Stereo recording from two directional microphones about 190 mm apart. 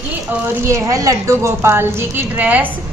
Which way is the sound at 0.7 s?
15° right (ahead or behind).